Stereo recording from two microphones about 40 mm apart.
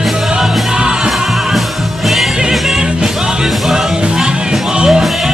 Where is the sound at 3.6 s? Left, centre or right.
Centre.